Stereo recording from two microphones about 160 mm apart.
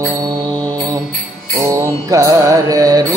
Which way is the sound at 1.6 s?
20° right (ahead or behind).